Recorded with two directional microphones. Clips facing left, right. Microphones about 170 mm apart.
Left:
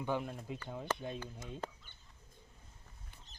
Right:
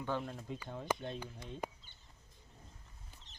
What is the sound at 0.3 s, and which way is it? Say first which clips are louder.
Speech: even; 5° left (ahead or behind).